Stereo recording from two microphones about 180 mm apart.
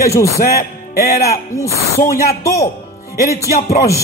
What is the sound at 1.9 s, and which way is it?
Speech, 15° left (ahead or behind).